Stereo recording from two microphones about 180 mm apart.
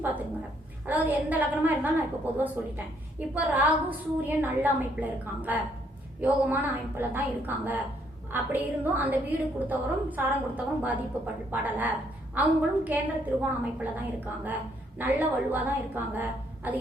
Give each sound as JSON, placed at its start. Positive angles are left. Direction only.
{"t": 0.9, "sound": "a woman's voice", "side_deg": -10}